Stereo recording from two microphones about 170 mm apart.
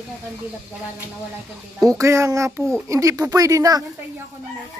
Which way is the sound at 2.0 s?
15° right (ahead or behind).